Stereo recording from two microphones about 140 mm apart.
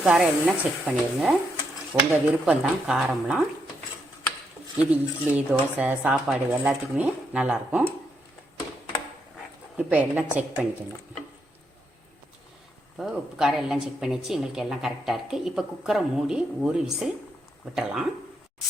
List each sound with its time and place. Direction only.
0.0 s a woman's voice: 5° right (ahead or behind)
1.9 s speech: 15° right (ahead or behind)
2.5 s a woman's voice: 5° right (ahead or behind)
4.8 s speech: 10° right (ahead or behind)
9.7 s speech: 10° right (ahead or behind)
13.0 s a woman's voice: 5° right (ahead or behind)